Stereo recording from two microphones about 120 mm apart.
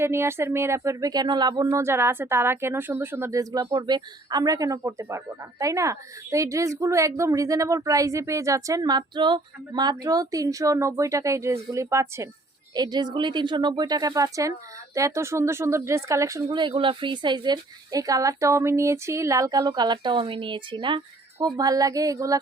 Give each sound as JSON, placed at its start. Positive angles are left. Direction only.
{"t": 0.0, "sound": "a woman's voice", "side_deg": -20}
{"t": 1.7, "sound": "a woman's voice", "side_deg": -20}
{"t": 12.7, "sound": "a woman's voice", "side_deg": -35}
{"t": 16.6, "sound": "speech", "side_deg": -45}